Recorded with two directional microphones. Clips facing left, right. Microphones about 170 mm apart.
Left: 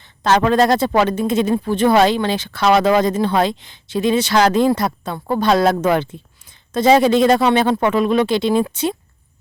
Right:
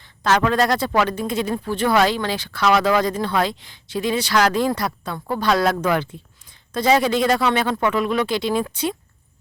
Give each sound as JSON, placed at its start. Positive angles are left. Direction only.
{"t": 0.0, "sound": "speech", "side_deg": 25}